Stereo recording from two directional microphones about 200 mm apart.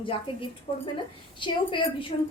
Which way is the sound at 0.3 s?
25° left (ahead or behind).